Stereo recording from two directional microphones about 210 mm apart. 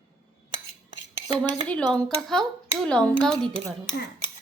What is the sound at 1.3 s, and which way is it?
Speech, 5° left (ahead or behind).